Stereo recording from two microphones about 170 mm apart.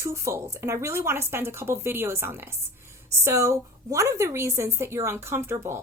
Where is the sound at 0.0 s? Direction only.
15° right (ahead or behind).